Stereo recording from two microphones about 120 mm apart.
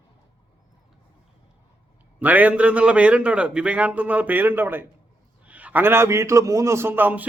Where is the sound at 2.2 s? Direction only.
15° right (ahead or behind).